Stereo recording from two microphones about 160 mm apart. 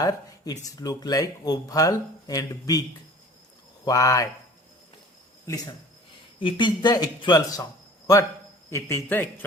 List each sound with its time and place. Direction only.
0.0 s speech: 25° left (ahead or behind)
3.8 s speech: 20° left (ahead or behind)
6.4 s a man's voice: 30° left (ahead or behind); by 9.2 s 15° left (ahead or behind)